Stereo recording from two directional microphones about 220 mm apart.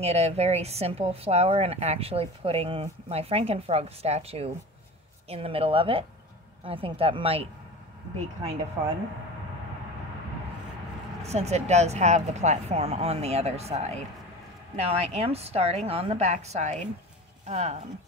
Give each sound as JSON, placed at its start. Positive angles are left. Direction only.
{"t": 0.0, "sound": "a woman's voice", "side_deg": -30}
{"t": 11.2, "sound": "a woman's voice", "side_deg": -30}